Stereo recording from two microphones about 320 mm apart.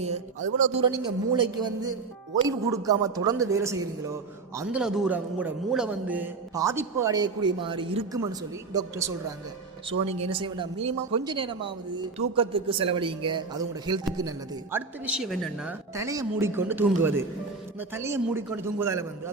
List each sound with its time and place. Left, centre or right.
0.8 s a man's voice: centre